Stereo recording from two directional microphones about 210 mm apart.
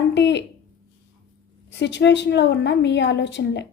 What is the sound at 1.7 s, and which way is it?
A woman's voice, 55° left (ahead or behind).